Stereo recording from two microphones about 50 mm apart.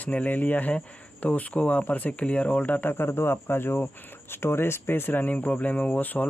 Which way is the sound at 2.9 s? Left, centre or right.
Left.